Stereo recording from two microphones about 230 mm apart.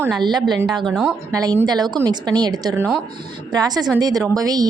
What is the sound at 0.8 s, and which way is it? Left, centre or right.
Speech, centre.